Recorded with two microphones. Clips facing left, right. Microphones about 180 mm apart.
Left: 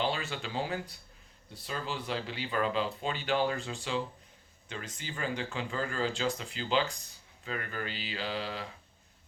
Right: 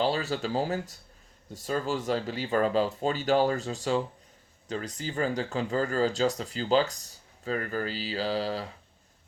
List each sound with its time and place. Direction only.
0.0 s speech: 40° right (ahead or behind)